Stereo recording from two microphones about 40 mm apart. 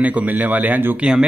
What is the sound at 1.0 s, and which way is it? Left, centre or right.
Speech, right.